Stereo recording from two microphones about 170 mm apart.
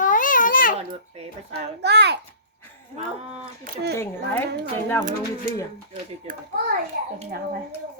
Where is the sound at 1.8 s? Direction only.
80° right.